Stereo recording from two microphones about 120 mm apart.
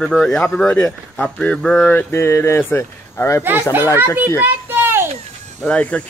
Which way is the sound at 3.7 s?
15° right (ahead or behind).